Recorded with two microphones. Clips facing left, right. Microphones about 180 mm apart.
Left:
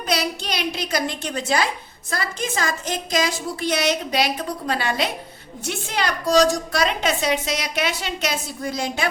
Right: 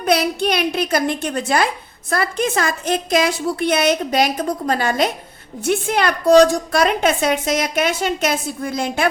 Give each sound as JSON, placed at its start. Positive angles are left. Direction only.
{"t": 0.0, "sound": "a woman's voice", "side_deg": -55}